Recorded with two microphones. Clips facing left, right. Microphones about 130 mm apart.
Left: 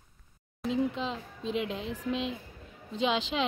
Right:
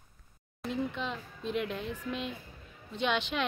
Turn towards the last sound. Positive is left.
turn(degrees=90)